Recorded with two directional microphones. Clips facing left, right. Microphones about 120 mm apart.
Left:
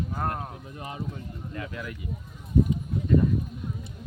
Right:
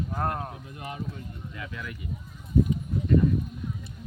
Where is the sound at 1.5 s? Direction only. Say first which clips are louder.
Left 3 dB; 35° left (ahead or behind).